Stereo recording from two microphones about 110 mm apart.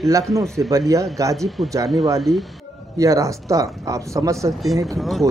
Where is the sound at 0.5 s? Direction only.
30° right (ahead or behind).